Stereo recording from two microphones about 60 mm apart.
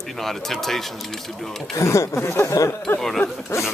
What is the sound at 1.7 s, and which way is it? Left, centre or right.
Speech, left.